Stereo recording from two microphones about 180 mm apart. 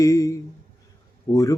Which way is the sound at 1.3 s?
30° left (ahead or behind).